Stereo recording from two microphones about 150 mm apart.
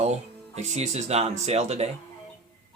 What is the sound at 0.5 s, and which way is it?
Speech, 45° right (ahead or behind).